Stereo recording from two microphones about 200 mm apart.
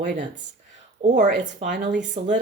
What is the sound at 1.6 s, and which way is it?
Speech, 60° right (ahead or behind).